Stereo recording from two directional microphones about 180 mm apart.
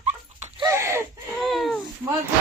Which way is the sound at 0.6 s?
15° right (ahead or behind).